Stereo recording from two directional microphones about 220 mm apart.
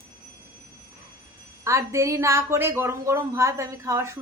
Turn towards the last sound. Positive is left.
turn(degrees=-15)  # may be behind; listen again after turning